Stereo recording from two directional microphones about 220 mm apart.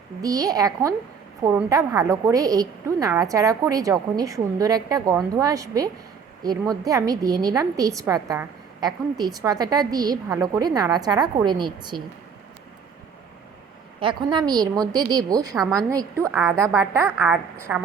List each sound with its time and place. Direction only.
0.2 s a woman's voice: 15° right (ahead or behind)
14.0 s a woman's voice: 20° right (ahead or behind)
16.3 s a woman's voice: 5° right (ahead or behind)
16.6 s a woman's voice: 15° right (ahead or behind)